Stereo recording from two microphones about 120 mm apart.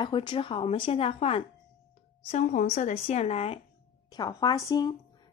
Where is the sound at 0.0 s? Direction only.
40° left (ahead or behind).